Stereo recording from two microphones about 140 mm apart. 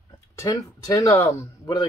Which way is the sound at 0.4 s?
25° left (ahead or behind).